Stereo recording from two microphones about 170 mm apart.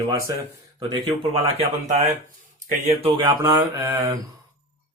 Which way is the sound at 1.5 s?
40° right (ahead or behind).